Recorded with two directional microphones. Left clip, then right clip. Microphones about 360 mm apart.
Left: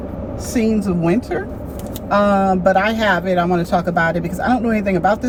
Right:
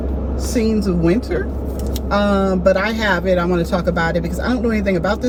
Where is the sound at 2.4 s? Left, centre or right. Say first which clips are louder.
Left 1 dB; centre.